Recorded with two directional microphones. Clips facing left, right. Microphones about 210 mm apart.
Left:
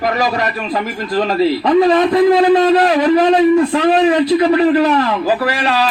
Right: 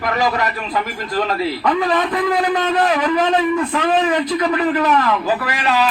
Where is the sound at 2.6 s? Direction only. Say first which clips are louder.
Left 6 dB; 30° left (ahead or behind).